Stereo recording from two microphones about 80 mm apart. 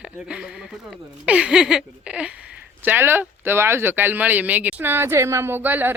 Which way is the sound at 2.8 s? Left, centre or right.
Right.